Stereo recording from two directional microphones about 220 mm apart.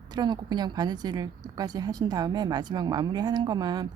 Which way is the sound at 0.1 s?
20° right (ahead or behind).